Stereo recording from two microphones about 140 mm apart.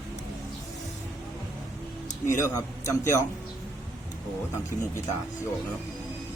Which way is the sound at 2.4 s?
20° left (ahead or behind).